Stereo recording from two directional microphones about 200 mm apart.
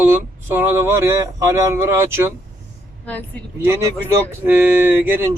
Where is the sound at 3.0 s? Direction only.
10° left (ahead or behind).